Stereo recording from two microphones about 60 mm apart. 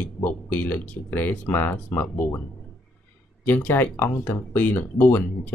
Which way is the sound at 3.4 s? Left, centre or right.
Left.